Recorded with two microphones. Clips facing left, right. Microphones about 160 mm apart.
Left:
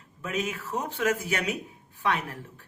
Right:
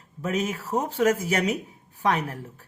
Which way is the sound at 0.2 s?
40° right (ahead or behind).